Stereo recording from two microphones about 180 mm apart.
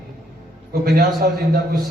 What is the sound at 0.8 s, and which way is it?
Speech, 55° right (ahead or behind).